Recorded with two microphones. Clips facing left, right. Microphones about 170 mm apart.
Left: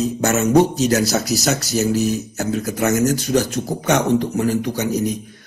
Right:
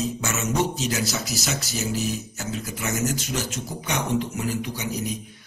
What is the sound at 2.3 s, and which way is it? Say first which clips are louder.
Speech: left 9 dB; 60° left (ahead or behind).